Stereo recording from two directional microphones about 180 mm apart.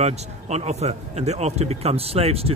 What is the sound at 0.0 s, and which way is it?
Speech, 35° right (ahead or behind).